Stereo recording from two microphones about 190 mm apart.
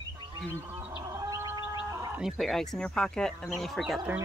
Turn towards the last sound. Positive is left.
turn(degrees=-5)  # may be behind; listen again after turning